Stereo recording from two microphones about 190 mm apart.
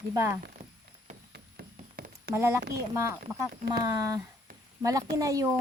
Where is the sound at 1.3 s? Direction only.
55° right (ahead or behind).